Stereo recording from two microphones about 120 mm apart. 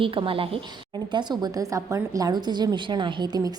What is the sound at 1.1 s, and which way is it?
A woman's voice, 35° right (ahead or behind).